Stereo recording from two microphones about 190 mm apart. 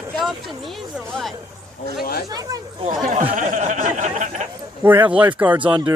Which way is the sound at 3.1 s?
35° right (ahead or behind).